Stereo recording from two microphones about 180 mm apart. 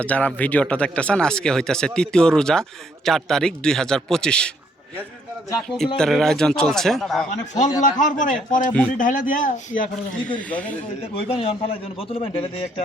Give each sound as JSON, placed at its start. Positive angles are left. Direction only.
{"t": 0.0, "sound": "speech", "side_deg": 10}
{"t": 5.5, "sound": "speech", "side_deg": 5}
{"t": 7.3, "sound": "a man's voice", "side_deg": 40}
{"t": 10.2, "sound": "speech", "side_deg": 10}
{"t": 11.1, "sound": "a man's voice", "side_deg": 30}